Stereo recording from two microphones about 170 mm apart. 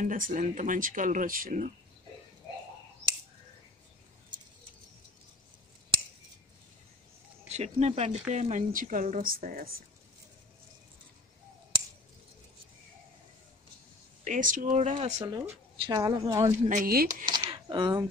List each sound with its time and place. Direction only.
0.0 s speech: 50° right (ahead or behind)
4.3 s bird: 25° right (ahead or behind)
7.4 s speech: 40° right (ahead or behind); by 9.7 s 55° right (ahead or behind)
14.2 s speech: 50° right (ahead or behind)
15.1 s a woman's voice: 20° right (ahead or behind)
16.6 s speech: 55° right (ahead or behind)
17.3 s a sound: 25° right (ahead or behind)